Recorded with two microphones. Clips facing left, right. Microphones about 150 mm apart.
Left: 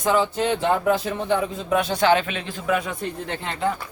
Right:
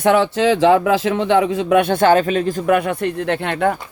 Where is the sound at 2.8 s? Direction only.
65° right (ahead or behind).